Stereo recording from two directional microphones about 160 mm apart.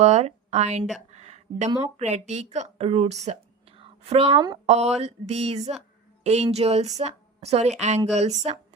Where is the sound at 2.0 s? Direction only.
45° right (ahead or behind).